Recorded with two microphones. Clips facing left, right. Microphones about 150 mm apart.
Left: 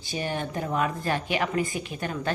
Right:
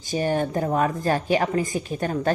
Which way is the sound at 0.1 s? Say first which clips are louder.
Right 7 dB; 45° right (ahead or behind).